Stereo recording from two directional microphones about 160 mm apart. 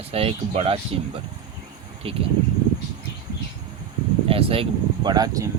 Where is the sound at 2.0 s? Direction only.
35° right (ahead or behind).